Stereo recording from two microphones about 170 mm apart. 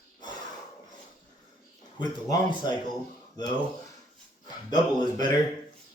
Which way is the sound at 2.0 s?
25° left (ahead or behind).